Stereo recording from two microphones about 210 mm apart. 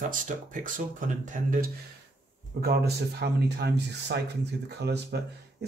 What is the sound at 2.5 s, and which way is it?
A man's voice, 50° right (ahead or behind).